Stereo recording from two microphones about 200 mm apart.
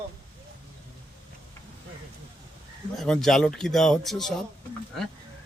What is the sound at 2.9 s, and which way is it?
Speech, centre (ahead or behind).